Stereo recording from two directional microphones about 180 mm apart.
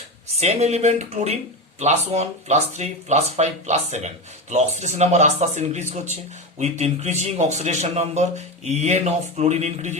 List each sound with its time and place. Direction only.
0.3 s speech: 40° right (ahead or behind)